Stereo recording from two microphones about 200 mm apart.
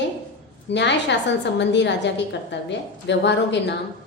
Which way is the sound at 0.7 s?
60° left (ahead or behind).